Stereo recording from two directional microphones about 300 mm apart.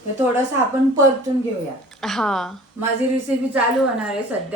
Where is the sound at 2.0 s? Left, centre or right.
Centre.